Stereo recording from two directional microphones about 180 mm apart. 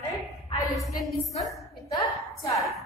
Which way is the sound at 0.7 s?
Centre (ahead or behind).